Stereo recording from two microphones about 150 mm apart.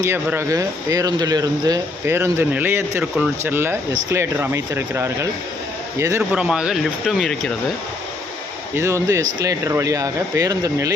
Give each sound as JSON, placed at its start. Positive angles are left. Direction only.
{"t": 0.0, "sound": "speech", "side_deg": -15}
{"t": 6.3, "sound": "speech", "side_deg": -5}
{"t": 8.7, "sound": "speech", "side_deg": -20}